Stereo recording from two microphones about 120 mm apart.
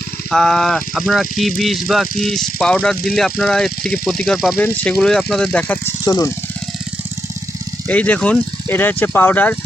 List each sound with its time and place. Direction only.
0.3 s speech: 5° left (ahead or behind)
6.1 s speech: 30° left (ahead or behind)
7.9 s speech: 15° left (ahead or behind)